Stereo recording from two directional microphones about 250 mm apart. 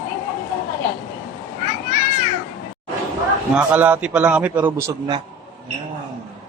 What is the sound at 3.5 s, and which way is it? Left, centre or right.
A man's voice, centre.